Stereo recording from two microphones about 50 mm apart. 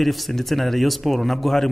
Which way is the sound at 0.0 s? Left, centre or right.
Centre.